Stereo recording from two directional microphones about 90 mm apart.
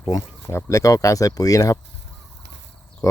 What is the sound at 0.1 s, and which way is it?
Speech, 40° left (ahead or behind).